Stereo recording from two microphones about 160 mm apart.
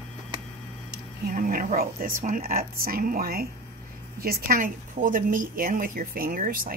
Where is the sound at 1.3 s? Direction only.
60° right (ahead or behind).